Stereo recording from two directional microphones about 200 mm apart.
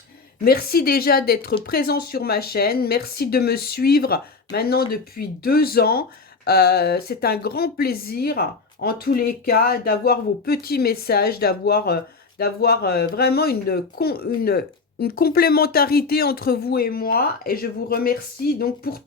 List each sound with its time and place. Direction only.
0.4 s speech: 50° left (ahead or behind)